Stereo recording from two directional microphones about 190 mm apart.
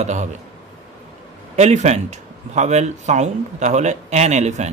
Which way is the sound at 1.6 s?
35° right (ahead or behind).